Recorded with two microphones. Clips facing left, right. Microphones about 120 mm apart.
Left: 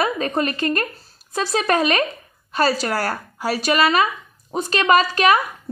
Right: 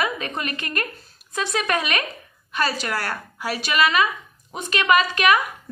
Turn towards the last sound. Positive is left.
turn(degrees=35)  # may be behind; listen again after turning